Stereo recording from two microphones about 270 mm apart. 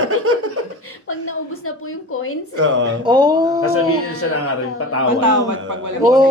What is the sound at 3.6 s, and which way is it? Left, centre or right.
Speech, left.